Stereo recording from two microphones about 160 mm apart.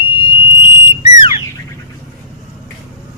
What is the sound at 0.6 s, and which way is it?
Whistle, 35° left (ahead or behind).